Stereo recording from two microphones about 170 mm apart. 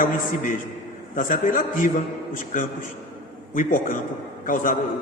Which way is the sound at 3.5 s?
55° left (ahead or behind).